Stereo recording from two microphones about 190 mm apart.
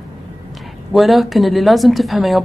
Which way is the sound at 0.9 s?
Centre (ahead or behind).